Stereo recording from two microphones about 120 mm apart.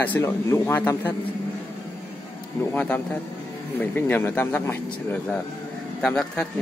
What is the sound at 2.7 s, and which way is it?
A man's voice, 15° left (ahead or behind).